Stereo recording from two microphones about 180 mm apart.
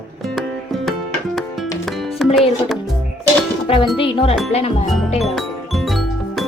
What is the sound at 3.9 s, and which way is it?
Speech, 30° left (ahead or behind).